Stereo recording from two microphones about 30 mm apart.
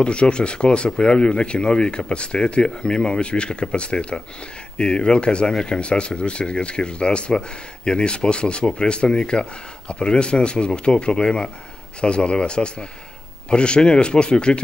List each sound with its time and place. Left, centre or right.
0.0 s speech: left